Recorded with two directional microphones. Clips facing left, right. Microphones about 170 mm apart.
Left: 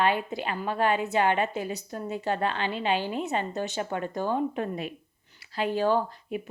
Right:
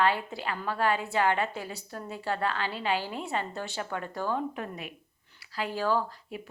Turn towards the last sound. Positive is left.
turn(degrees=20)  # may be behind; listen again after turning